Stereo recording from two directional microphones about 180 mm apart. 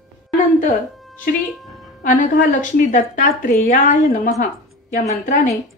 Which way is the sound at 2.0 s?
45° left (ahead or behind).